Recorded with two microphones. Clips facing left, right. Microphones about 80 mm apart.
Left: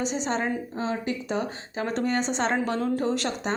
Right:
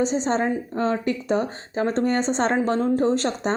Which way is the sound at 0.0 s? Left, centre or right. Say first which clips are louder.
Right 5 dB; right.